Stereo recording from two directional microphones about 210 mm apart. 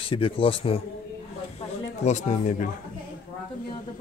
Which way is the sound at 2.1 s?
35° left (ahead or behind).